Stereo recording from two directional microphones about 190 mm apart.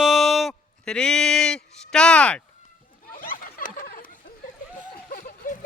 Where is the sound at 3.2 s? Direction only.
50° left (ahead or behind).